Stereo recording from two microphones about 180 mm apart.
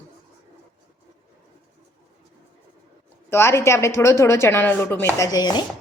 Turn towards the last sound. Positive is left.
turn(degrees=20)  # may be behind; listen again after turning